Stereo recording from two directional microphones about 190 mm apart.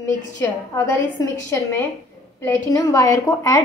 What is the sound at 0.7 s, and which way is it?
A woman's voice, 15° left (ahead or behind).